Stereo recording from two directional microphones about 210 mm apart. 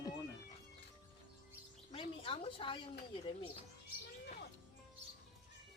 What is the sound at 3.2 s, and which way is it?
Speech, 25° left (ahead or behind).